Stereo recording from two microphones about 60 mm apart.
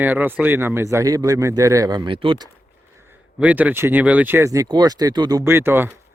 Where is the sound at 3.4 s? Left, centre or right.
Right.